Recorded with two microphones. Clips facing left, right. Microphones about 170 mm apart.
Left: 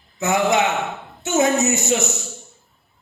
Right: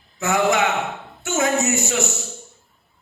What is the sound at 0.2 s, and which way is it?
Speech, 20° left (ahead or behind).